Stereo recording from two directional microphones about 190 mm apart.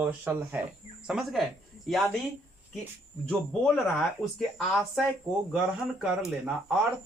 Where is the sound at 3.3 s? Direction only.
5° left (ahead or behind).